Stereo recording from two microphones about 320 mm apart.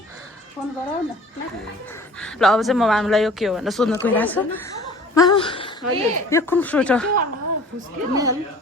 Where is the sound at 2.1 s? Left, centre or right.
Centre.